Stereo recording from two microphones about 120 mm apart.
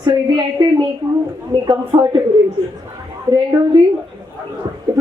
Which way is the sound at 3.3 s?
30° right (ahead or behind).